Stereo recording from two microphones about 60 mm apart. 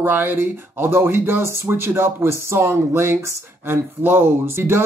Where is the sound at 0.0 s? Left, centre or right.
Right.